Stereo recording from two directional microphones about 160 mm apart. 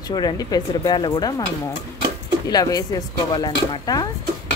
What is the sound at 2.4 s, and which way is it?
Speech, 25° left (ahead or behind).